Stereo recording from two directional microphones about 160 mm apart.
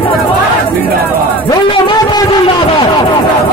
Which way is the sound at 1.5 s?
30° left (ahead or behind).